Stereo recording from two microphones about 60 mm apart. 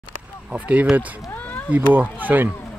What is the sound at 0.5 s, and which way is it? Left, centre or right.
Speech, right.